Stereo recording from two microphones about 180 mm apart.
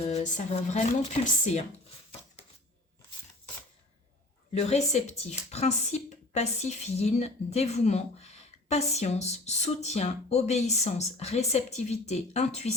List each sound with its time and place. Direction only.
0.0 s a woman's voice: 40° left (ahead or behind)
4.5 s a woman's voice: 40° left (ahead or behind)